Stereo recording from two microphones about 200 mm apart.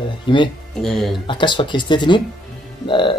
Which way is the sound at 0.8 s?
Centre (ahead or behind).